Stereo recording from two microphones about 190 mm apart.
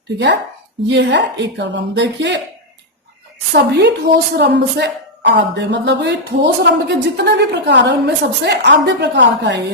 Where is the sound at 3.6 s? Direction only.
60° right (ahead or behind).